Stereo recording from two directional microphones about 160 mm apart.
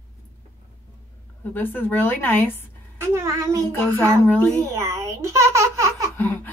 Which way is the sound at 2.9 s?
15° right (ahead or behind).